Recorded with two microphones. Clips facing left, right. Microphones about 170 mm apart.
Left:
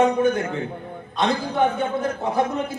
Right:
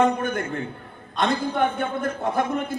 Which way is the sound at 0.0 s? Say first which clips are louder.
Left 3 dB; 55° right (ahead or behind).